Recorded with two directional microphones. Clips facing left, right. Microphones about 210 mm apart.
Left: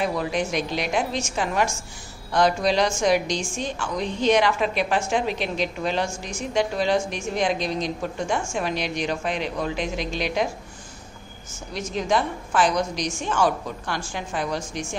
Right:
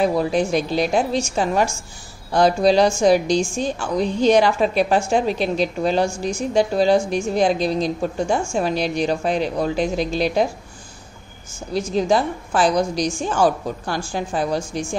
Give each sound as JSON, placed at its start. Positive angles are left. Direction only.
{"t": 0.0, "sound": "a woman's voice", "side_deg": -35}
{"t": 11.7, "sound": "a woman's voice", "side_deg": -35}